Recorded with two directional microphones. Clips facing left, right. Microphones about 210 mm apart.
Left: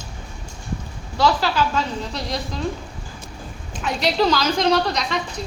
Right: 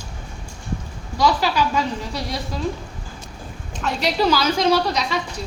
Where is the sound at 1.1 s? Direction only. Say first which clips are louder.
Even; 15° right (ahead or behind).